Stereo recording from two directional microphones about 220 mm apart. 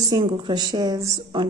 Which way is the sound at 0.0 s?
20° right (ahead or behind).